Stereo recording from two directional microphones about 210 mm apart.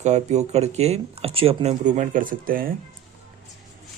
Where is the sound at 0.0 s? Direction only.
35° right (ahead or behind).